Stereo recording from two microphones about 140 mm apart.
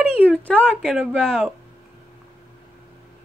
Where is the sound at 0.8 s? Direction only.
Centre (ahead or behind).